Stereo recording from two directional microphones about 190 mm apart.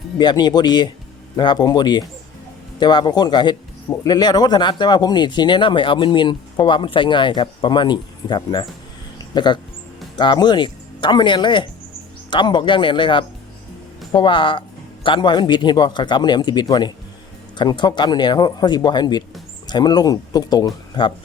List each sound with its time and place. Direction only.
0.2 s speech: 25° left (ahead or behind)